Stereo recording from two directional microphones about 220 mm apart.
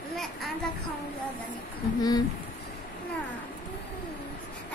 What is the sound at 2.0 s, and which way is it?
Speech, 20° left (ahead or behind).